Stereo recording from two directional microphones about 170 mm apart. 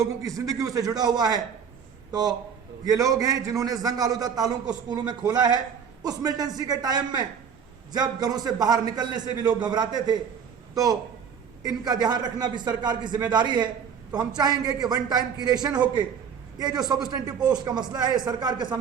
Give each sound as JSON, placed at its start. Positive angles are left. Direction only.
{"t": 0.0, "sound": "a man's voice", "side_deg": -20}
{"t": 2.8, "sound": "a man's voice", "side_deg": -20}
{"t": 11.6, "sound": "a man's voice", "side_deg": -20}